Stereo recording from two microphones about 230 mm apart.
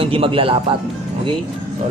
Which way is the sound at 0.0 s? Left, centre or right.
Right.